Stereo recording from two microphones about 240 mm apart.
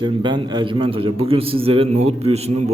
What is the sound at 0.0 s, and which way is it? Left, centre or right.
A man's voice, centre.